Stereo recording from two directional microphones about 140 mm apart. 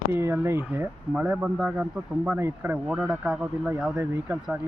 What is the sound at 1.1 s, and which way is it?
Speech, 5° right (ahead or behind).